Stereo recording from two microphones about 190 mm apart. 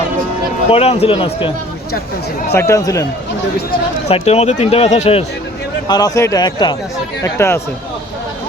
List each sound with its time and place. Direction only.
0.7 s speech: 30° left (ahead or behind)
2.5 s speech: 15° left (ahead or behind)
4.1 s speech: 35° left (ahead or behind)
5.9 s speech: 20° left (ahead or behind)